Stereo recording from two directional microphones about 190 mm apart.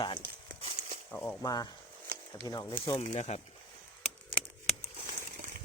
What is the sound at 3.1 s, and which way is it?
Speech, 35° left (ahead or behind).